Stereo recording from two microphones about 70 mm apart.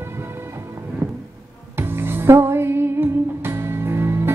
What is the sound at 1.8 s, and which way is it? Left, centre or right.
Music, right.